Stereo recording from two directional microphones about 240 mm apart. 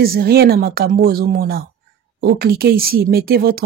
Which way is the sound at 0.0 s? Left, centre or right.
Right.